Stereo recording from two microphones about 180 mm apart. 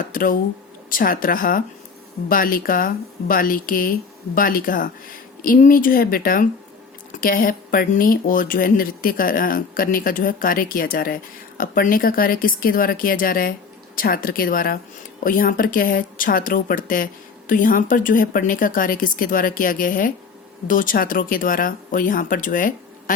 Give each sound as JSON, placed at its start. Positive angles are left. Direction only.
{"t": 0.0, "sound": "speech", "side_deg": 50}